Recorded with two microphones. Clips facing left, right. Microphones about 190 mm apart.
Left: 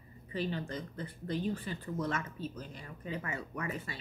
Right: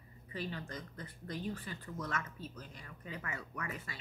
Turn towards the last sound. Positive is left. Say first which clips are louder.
# left 5 dB
turn(degrees=30)  # may be behind; listen again after turning